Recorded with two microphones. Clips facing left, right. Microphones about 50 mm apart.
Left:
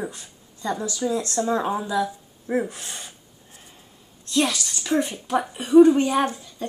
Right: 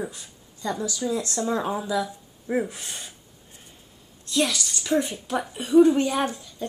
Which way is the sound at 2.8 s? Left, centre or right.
Centre.